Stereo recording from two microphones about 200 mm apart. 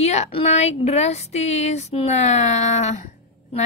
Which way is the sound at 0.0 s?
35° left (ahead or behind).